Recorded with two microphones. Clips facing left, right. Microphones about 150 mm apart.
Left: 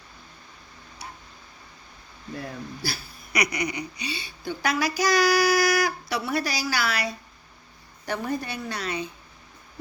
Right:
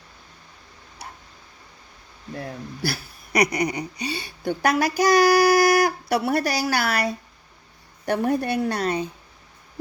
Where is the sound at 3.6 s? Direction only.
40° right (ahead or behind).